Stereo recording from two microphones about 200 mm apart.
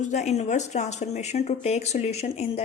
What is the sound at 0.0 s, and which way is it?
Speech, 35° left (ahead or behind).